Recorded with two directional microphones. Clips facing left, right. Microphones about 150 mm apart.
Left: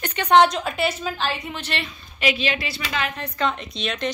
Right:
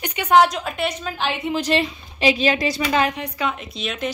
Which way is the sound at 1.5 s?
35° right (ahead or behind).